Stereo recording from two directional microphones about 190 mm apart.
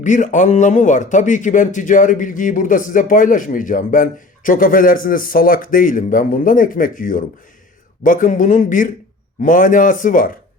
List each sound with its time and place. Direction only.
0.0 s a man's voice: 40° left (ahead or behind)